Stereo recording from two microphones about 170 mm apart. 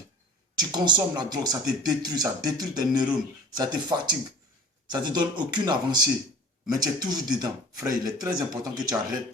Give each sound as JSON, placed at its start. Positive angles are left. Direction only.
{"t": 0.5, "sound": "speech", "side_deg": -25}